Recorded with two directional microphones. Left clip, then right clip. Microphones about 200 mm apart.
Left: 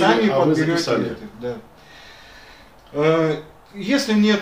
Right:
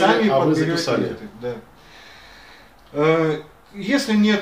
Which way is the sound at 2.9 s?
15° left (ahead or behind).